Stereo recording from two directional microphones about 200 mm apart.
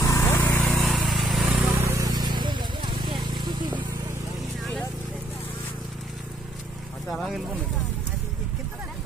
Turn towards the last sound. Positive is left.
turn(degrees=0)  # may be behind; listen again after turning